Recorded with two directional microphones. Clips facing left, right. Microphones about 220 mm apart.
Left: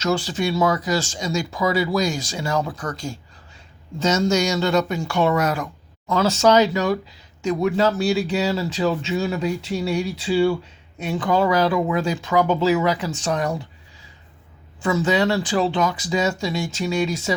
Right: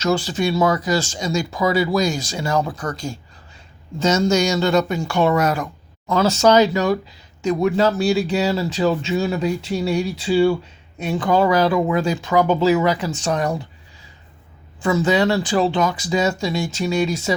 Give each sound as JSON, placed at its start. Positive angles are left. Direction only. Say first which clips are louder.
{"t": 0.0, "sound": "speech", "louder": "right 2 dB", "side_deg": -40}
{"t": 14.8, "sound": "speech", "louder": "right 2 dB", "side_deg": -35}